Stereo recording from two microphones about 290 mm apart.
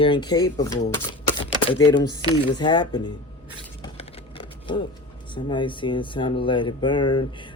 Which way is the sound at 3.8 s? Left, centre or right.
Centre.